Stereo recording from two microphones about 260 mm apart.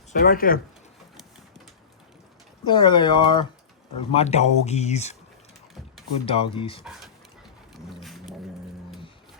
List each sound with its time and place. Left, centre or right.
0.1 s speech: left
2.6 s speech: centre
6.2 s speech: left
7.7 s a sound: centre